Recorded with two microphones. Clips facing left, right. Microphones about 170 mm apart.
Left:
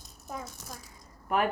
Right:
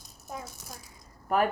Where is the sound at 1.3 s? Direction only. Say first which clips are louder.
Right 2 dB; 40° right (ahead or behind).